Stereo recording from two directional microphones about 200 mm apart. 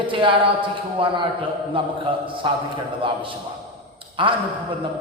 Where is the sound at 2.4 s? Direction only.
25° right (ahead or behind).